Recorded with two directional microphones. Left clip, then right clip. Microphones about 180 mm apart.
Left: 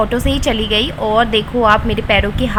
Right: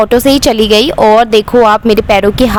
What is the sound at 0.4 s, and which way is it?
Speech, 75° right (ahead or behind).